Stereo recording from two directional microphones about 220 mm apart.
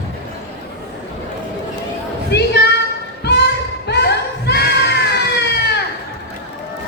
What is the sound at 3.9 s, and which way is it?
Crowd, 50° left (ahead or behind).